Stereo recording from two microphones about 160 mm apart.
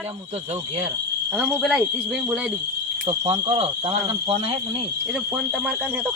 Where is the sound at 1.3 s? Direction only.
5° right (ahead or behind).